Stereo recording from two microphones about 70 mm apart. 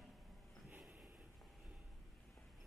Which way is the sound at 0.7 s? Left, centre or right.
Centre.